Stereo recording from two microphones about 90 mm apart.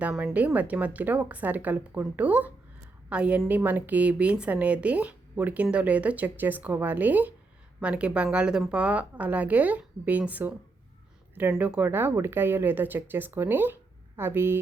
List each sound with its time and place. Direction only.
0.0 s a woman's voice: 15° right (ahead or behind)
11.5 s a woman's voice: 10° right (ahead or behind)
11.8 s speech: 25° right (ahead or behind)